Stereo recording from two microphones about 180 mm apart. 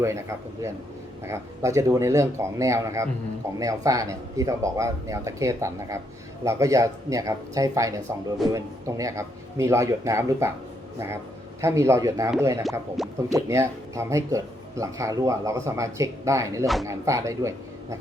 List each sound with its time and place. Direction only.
0.0 s speech: 15° right (ahead or behind)
11.6 s speech: 15° right (ahead or behind)
13.0 s speech: centre (ahead or behind)
13.3 s speech: 15° right (ahead or behind)